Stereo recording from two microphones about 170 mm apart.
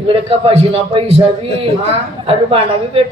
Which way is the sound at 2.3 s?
35° right (ahead or behind).